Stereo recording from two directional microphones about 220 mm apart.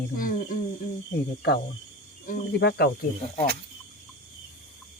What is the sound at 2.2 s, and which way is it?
Speech, 45° left (ahead or behind).